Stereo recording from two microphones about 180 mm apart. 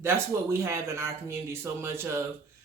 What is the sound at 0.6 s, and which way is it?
Speech, 15° right (ahead or behind).